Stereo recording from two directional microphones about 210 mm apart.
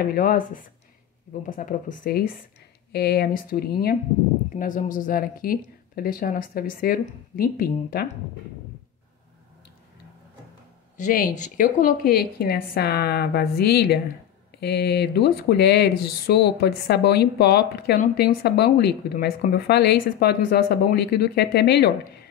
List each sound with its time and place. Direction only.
0.1 s speech: 40° left (ahead or behind)
11.0 s speech: 40° left (ahead or behind)